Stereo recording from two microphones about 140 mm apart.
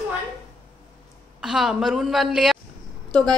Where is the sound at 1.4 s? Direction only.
5° right (ahead or behind).